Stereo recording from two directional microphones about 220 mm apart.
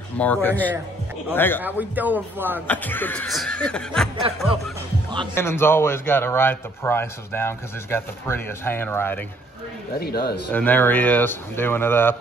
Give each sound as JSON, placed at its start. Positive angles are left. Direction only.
{"t": 0.2, "sound": "a man's voice", "side_deg": 10}
{"t": 1.6, "sound": "a man's voice", "side_deg": -10}
{"t": 2.7, "sound": "speech", "side_deg": 10}
{"t": 5.3, "sound": "a man's voice", "side_deg": 10}
{"t": 9.9, "sound": "speech", "side_deg": 45}
{"t": 10.5, "sound": "a man's voice", "side_deg": 10}